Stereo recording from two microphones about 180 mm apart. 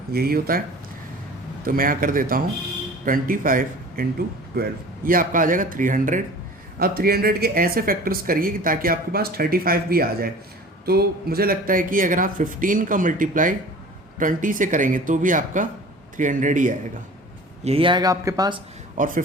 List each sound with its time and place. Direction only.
0.1 s speech: 55° right (ahead or behind)
1.6 s speech: 50° right (ahead or behind)
4.5 s speech: 60° right (ahead or behind)
5.0 s speech: 50° right (ahead or behind)
17.6 s speech: 35° right (ahead or behind)
18.9 s speech: 50° right (ahead or behind)